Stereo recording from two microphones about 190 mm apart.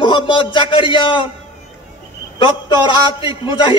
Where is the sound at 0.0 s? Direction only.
25° left (ahead or behind).